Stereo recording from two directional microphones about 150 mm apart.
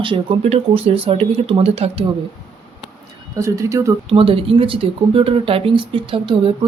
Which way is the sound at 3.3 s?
20° right (ahead or behind).